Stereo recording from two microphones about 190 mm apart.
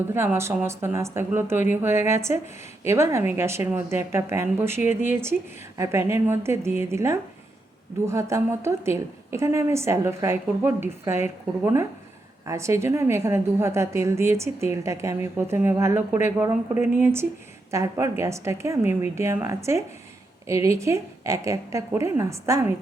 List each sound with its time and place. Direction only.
0.1 s a woman's voice: 15° right (ahead or behind)
4.9 s speech: 40° left (ahead or behind)
5.2 s a woman's voice: 15° right (ahead or behind)